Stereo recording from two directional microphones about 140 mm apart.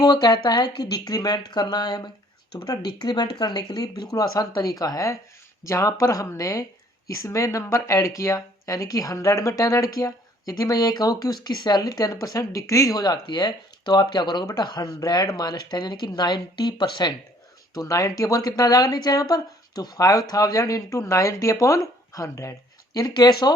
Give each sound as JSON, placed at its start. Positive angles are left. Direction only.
{"t": 0.0, "sound": "speech", "side_deg": 30}